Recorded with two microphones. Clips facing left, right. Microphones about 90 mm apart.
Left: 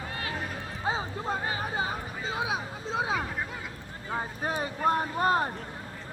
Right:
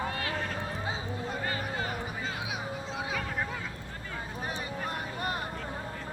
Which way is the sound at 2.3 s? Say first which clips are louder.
Left 4 dB; 30° left (ahead or behind).